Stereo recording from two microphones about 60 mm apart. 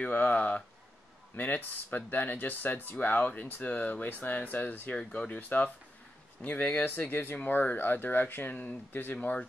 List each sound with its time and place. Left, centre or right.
0.0 s speech: left